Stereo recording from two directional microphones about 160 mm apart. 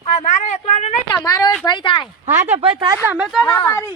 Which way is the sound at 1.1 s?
25° left (ahead or behind).